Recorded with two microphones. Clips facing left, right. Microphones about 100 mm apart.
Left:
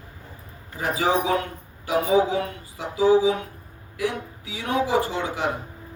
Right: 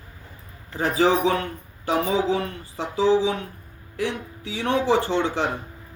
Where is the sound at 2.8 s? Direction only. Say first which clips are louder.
Left 1 dB; 30° right (ahead or behind).